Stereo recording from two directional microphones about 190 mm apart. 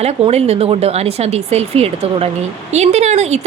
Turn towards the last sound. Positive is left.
turn(degrees=-35)  # may be behind; listen again after turning